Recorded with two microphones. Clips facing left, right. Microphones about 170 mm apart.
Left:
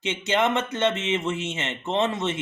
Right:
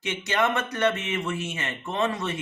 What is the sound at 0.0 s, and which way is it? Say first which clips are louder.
Speech: left 2 dB; 20° left (ahead or behind).